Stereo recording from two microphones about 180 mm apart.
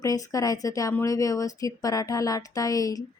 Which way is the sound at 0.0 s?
20° left (ahead or behind).